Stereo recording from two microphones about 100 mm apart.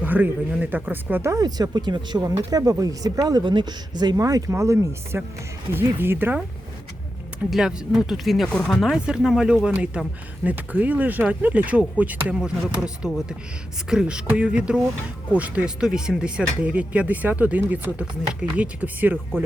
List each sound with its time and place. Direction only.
0.0 s speech: 15° right (ahead or behind)
1.1 s speech: 25° right (ahead or behind)
1.4 s speech: 40° right (ahead or behind)
2.2 s speech: 35° right (ahead or behind); by 6.4 s 20° right (ahead or behind)
7.5 s speech: 5° right (ahead or behind)